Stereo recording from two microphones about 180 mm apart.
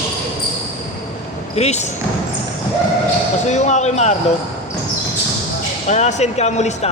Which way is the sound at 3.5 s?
40° left (ahead or behind).